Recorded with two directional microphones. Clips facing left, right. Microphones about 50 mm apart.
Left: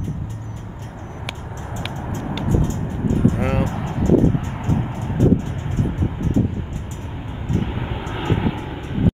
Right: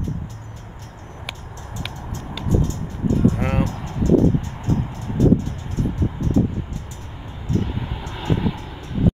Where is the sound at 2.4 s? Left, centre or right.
Left.